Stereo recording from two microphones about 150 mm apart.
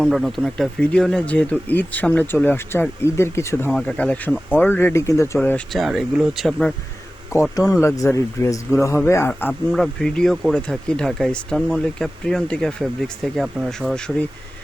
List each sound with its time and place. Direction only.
0.0 s speech: centre (ahead or behind); by 3.7 s 15° left (ahead or behind)
3.7 s speech: 5° left (ahead or behind)
5.4 s speech: 5° left (ahead or behind)
7.3 s speech: 20° left (ahead or behind)
9.7 s speech: centre (ahead or behind)